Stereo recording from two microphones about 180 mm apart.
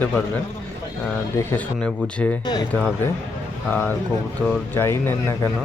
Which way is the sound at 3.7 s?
10° left (ahead or behind).